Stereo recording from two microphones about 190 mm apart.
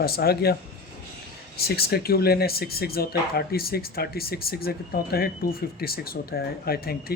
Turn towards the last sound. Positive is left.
turn(degrees=55)  # may be behind; listen again after turning